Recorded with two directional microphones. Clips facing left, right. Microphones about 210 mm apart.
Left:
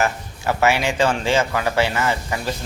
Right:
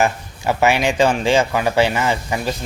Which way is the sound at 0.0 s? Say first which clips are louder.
Right 3 dB; 15° right (ahead or behind).